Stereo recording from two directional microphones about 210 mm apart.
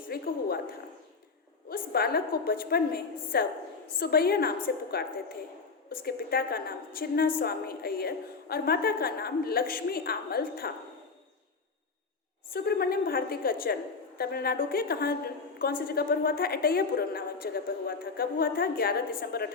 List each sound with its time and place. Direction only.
0.1 s a sound: 45° left (ahead or behind)
1.7 s a woman's voice: 50° left (ahead or behind)
12.5 s a woman's voice: 45° left (ahead or behind)